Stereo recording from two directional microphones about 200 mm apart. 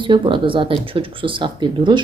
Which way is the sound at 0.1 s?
25° right (ahead or behind).